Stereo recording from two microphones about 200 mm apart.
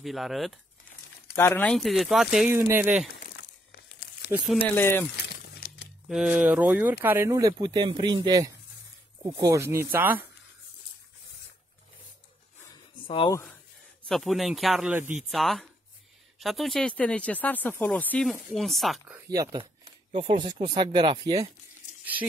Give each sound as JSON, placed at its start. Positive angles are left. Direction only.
{"t": 0.0, "sound": "speech", "side_deg": 0}
{"t": 1.3, "sound": "speech", "side_deg": 10}
{"t": 4.7, "sound": "speech", "side_deg": 10}
{"t": 5.1, "sound": "a sound", "side_deg": 55}
{"t": 6.0, "sound": "speech", "side_deg": -5}
{"t": 13.0, "sound": "speech", "side_deg": 25}
{"t": 14.0, "sound": "speech", "side_deg": 0}
{"t": 19.1, "sound": "speech", "side_deg": -15}